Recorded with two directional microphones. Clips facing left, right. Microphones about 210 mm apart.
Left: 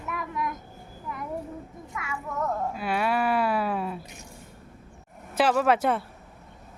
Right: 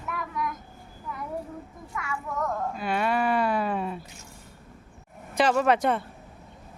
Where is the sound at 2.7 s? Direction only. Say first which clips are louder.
Right 1 dB; 5° left (ahead or behind).